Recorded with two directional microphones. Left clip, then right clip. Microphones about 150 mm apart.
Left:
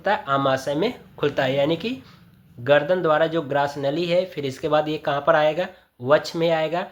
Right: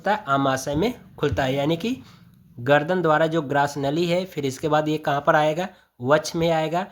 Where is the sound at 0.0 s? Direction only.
40° right (ahead or behind).